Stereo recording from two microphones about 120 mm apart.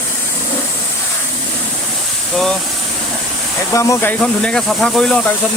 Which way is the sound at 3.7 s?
25° left (ahead or behind).